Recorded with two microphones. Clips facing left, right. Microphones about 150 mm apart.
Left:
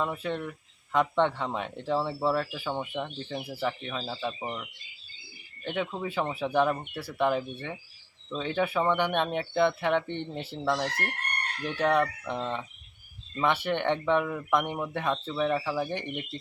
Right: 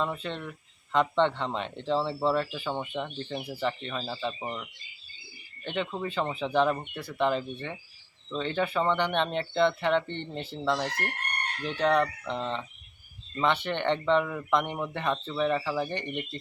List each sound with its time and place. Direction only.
0.0 s speech: 5° left (ahead or behind)